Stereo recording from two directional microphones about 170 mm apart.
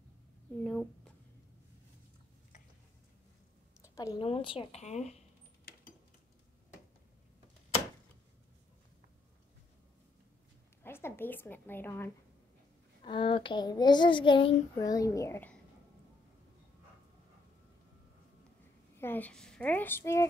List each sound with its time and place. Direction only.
0.7 s speech: centre (ahead or behind)
3.8 s a sound: 20° left (ahead or behind)
4.2 s speech: 30° left (ahead or behind)
5.7 s a sound: 65° left (ahead or behind)
10.8 s a woman's voice: 15° left (ahead or behind)
13.0 s a child's voice: 30° left (ahead or behind)
18.9 s a woman's voice: 10° left (ahead or behind)